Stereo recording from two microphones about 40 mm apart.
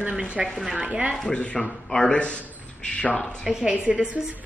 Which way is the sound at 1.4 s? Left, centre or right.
Left.